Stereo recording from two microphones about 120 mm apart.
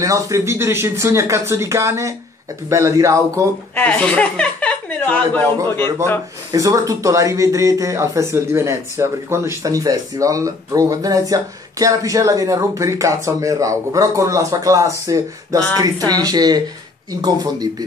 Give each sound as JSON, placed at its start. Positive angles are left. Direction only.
{"t": 0.0, "sound": "speech", "side_deg": -25}
{"t": 3.7, "sound": "speech", "side_deg": 15}
{"t": 5.6, "sound": "speech", "side_deg": -40}